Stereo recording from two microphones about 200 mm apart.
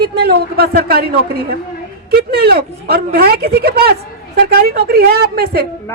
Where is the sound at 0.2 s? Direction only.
50° right (ahead or behind).